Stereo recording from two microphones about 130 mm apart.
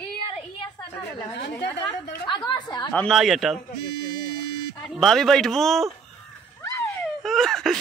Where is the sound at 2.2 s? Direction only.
35° left (ahead or behind).